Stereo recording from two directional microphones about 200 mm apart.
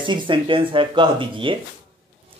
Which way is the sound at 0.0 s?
25° right (ahead or behind).